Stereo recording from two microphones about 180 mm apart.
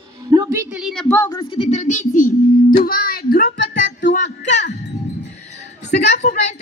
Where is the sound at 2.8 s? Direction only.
55° left (ahead or behind).